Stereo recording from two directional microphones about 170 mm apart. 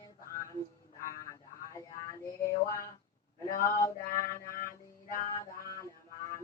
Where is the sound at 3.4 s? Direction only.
55° left (ahead or behind).